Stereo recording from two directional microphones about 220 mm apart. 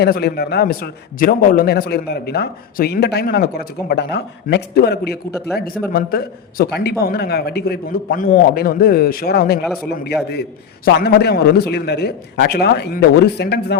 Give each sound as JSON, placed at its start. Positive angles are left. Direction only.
{"t": 0.0, "sound": "a man's voice", "side_deg": 45}
{"t": 10.8, "sound": "a man's voice", "side_deg": 45}